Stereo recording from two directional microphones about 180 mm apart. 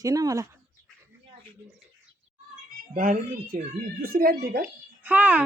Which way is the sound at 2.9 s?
50° right (ahead or behind).